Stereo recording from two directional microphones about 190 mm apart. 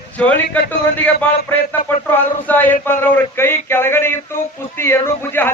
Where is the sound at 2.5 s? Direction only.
10° left (ahead or behind).